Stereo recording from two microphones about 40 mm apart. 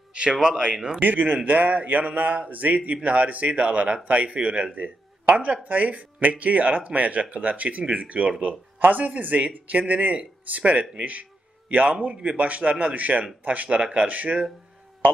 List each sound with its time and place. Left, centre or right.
0.1 s speech: right
1.0 s speech: right
4.7 s a sound: right
5.3 s speech: right
13.7 s speech: right
14.0 s speech: right